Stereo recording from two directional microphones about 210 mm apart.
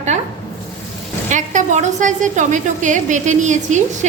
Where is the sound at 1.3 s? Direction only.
35° right (ahead or behind).